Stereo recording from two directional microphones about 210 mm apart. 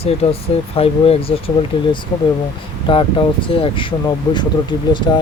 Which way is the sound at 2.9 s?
25° left (ahead or behind).